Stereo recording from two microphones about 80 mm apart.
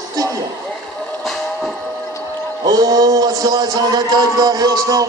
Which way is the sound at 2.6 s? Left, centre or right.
Right.